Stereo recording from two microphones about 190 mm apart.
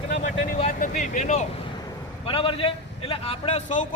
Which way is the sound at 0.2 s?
40° left (ahead or behind).